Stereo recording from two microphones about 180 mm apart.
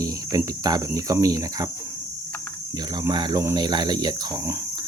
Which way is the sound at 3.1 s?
25° right (ahead or behind).